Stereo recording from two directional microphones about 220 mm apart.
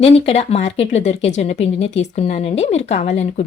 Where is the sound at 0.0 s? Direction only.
30° left (ahead or behind).